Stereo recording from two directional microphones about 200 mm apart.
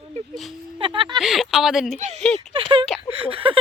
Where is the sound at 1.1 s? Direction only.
Centre (ahead or behind).